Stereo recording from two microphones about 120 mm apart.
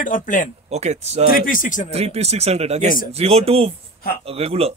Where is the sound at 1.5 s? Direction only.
90° left.